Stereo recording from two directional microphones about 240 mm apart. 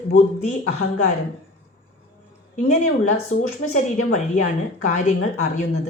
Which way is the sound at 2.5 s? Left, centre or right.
Left.